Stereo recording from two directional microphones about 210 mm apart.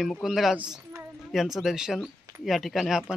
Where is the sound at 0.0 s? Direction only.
Centre (ahead or behind).